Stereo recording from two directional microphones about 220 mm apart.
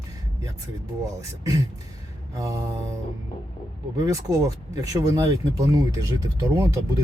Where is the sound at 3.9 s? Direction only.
15° right (ahead or behind).